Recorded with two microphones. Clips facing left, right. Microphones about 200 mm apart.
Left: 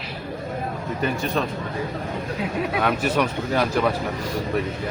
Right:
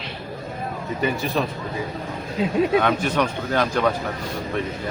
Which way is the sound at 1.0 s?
Centre (ahead or behind).